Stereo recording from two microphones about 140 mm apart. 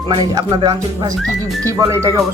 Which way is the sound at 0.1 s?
30° right (ahead or behind).